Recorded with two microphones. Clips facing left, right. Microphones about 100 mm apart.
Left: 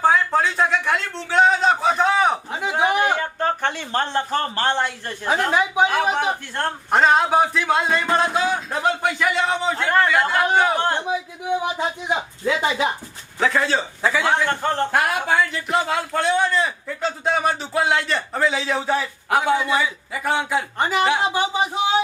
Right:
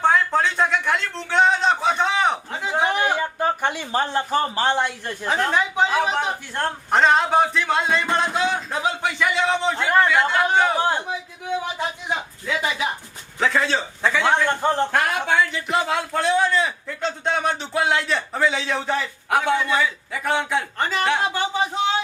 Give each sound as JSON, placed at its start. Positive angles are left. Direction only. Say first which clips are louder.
{"t": 0.0, "sound": "a sound", "louder": "left 1 dB", "side_deg": 0}
{"t": 3.2, "sound": "speech", "louder": "even", "side_deg": -10}
{"t": 5.0, "sound": "a man's voice", "louder": "left 1 dB", "side_deg": 10}
{"t": 10.8, "sound": "a sound", "louder": "even", "side_deg": -10}
{"t": 11.5, "sound": "speech", "louder": "left 3 dB", "side_deg": 15}
{"t": 12.5, "sound": "speech", "louder": "left 4 dB", "side_deg": 30}
{"t": 13.4, "sound": "a man's voice", "louder": "left 1 dB", "side_deg": 0}
{"t": 14.6, "sound": "a man's voice", "louder": "right 1 dB", "side_deg": -15}
{"t": 14.9, "sound": "a man's voice", "louder": "left 1 dB", "side_deg": 5}
{"t": 20.7, "sound": "speech", "louder": "left 4 dB", "side_deg": 15}